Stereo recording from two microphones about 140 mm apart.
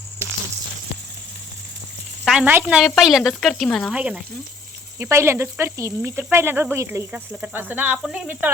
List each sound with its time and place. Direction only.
2.2 s sizzle: 5° right (ahead or behind)
2.5 s speech: 10° right (ahead or behind); by 3.9 s 5° left (ahead or behind)
3.9 s speech: 10° right (ahead or behind)
4.9 s speech: 20° right (ahead or behind)